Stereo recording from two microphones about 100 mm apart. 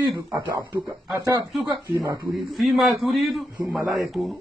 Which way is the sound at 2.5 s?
Centre (ahead or behind).